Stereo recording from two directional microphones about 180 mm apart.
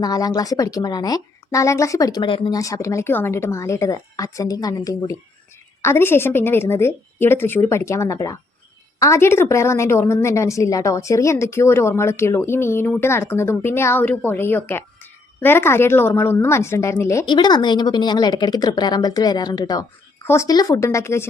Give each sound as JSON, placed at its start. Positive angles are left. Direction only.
{"t": 0.0, "sound": "a woman's voice", "side_deg": 20}